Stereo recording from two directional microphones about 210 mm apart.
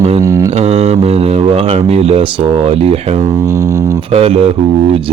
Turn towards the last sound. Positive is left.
turn(degrees=-25)  # may be behind; listen again after turning